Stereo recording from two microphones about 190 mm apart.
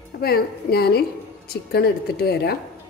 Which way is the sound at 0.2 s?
55° left (ahead or behind).